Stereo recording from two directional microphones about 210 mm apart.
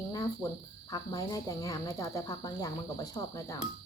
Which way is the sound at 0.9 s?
20° left (ahead or behind).